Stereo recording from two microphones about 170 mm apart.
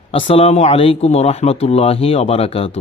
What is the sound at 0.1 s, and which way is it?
Speech, 30° left (ahead or behind).